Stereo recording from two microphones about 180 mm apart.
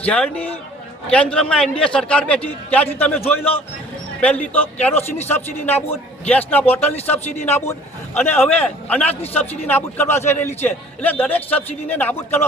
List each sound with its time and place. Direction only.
0.0 s a man's voice: 5° left (ahead or behind)
7.7 s a man's voice: 10° left (ahead or behind)